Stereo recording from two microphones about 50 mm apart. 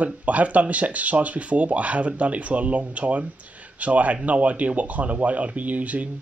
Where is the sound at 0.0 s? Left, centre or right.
Right.